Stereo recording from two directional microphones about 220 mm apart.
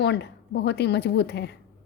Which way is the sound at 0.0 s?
50° left (ahead or behind).